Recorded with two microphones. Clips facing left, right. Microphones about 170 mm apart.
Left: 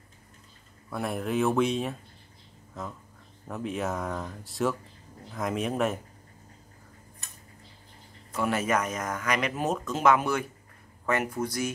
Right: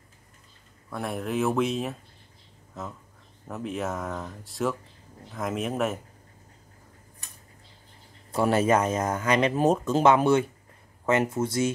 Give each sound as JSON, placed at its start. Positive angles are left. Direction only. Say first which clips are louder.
{"t": 0.8, "sound": "speech", "louder": "even", "side_deg": 0}
{"t": 3.4, "sound": "speech", "louder": "even", "side_deg": 0}
{"t": 8.3, "sound": "speech", "louder": "right 5 dB", "side_deg": -35}